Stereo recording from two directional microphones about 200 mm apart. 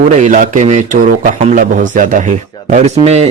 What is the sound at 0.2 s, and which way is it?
Speech, 40° right (ahead or behind).